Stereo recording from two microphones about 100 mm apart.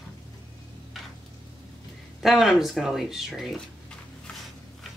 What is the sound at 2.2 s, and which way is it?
Speech, 5° right (ahead or behind).